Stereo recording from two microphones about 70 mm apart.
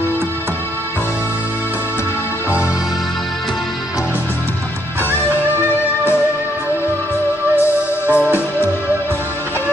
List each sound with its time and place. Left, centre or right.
8.1 s music: right